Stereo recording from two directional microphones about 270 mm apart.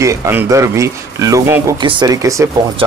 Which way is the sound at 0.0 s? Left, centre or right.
Centre.